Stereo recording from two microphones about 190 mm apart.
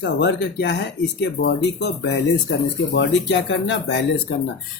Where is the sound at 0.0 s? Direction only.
65° left (ahead or behind).